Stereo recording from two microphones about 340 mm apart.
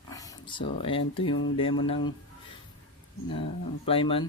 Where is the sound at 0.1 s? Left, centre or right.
Centre.